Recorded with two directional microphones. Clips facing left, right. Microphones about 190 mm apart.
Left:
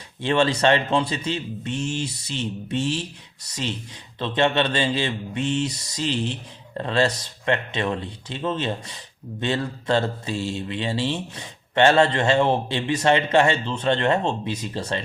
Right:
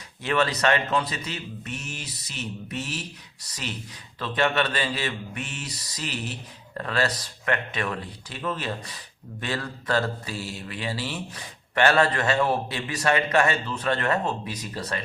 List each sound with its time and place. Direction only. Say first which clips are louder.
0.2 s speech: left 4 dB; 25° left (ahead or behind)